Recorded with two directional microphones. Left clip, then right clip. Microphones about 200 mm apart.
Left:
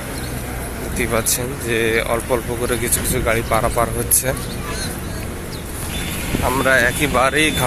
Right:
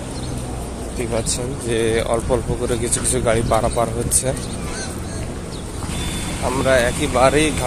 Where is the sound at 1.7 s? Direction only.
10° right (ahead or behind).